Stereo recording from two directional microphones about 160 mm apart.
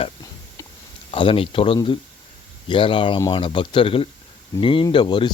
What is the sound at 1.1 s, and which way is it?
Speech, 35° left (ahead or behind).